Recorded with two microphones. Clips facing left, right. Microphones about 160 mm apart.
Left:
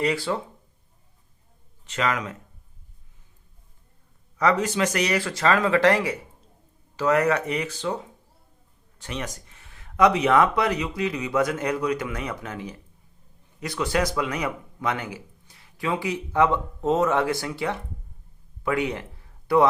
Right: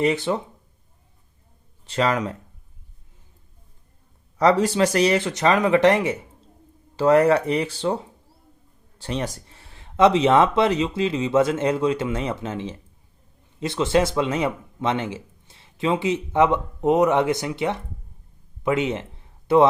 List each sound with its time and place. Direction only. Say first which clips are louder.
0.0 s speech: right 3 dB; 20° right (ahead or behind)
1.9 s speech: right 4 dB; 35° right (ahead or behind)
4.4 s a man's voice: right 4 dB; 30° right (ahead or behind)